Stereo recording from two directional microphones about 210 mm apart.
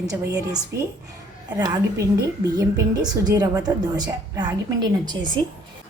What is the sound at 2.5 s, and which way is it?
A woman's voice, 20° right (ahead or behind).